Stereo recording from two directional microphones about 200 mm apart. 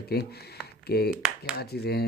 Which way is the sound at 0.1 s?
55° left (ahead or behind).